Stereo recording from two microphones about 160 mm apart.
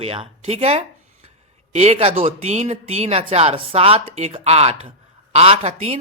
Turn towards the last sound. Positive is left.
turn(degrees=-40)  # may be behind; listen again after turning